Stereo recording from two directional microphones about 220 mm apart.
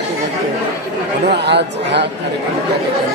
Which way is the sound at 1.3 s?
50° right (ahead or behind).